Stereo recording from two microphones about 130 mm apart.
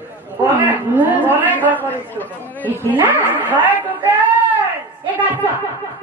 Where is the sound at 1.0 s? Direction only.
15° right (ahead or behind).